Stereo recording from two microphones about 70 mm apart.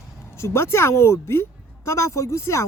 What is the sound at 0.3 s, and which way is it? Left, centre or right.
Speech, left.